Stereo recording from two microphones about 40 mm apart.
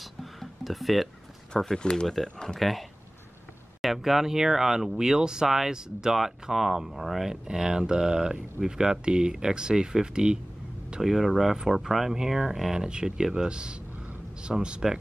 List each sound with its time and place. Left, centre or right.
0.0 s music: centre
1.7 s speech: left
2.0 s speech: centre
2.6 s speech: centre
6.1 s speech: centre
7.2 s speech: centre
11.0 s speech: centre
12.7 s speech: centre
14.5 s speech: centre